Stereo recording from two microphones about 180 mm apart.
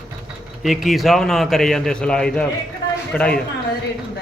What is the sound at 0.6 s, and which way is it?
A man's voice, centre (ahead or behind).